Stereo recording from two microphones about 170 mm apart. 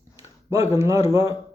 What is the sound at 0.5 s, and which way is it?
Speech, 15° right (ahead or behind).